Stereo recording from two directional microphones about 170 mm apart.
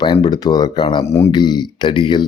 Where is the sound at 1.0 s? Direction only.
15° left (ahead or behind).